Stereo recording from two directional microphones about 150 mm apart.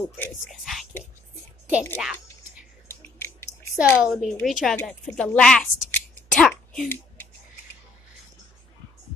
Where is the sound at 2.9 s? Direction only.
15° left (ahead or behind).